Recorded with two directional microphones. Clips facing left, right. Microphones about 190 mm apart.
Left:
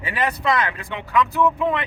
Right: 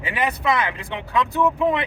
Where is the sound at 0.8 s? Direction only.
30° right (ahead or behind).